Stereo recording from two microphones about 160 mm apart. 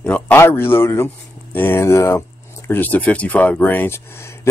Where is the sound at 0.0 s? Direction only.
10° left (ahead or behind).